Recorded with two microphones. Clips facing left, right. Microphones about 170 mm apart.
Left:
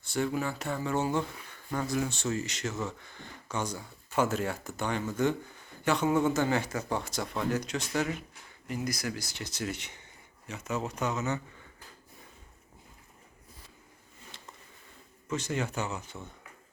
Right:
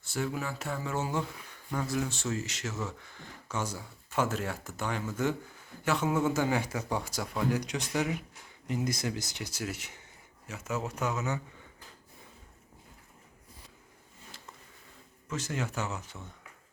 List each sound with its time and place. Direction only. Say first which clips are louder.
0.0 s speech: left 3 dB; 5° right (ahead or behind)
14.3 s a sound: even; 5° right (ahead or behind)
15.3 s speech: left 3 dB; centre (ahead or behind)